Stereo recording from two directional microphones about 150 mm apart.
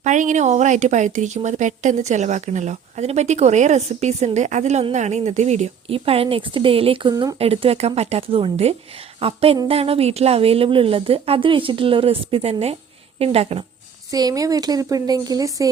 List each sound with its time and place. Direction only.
0.0 s speech: 55° right (ahead or behind); by 7.3 s 30° right (ahead or behind)
7.3 s speech: 40° right (ahead or behind)
14.1 s speech: 25° right (ahead or behind)